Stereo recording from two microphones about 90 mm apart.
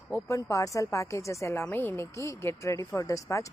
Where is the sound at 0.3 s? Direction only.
40° left (ahead or behind).